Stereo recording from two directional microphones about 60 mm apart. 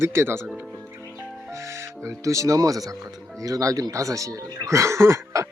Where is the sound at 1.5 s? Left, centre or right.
Right.